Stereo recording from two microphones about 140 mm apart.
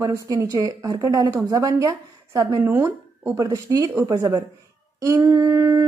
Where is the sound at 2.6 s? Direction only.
10° right (ahead or behind).